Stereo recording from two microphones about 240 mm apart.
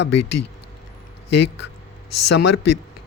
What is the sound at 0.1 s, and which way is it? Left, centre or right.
Speech, left.